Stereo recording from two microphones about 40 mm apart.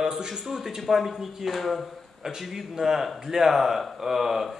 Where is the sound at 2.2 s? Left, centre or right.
Centre.